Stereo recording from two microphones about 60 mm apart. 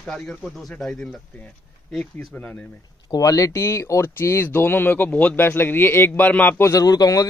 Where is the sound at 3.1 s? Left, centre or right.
Left.